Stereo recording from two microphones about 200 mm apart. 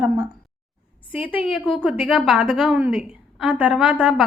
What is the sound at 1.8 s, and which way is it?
A woman's voice, 5° right (ahead or behind).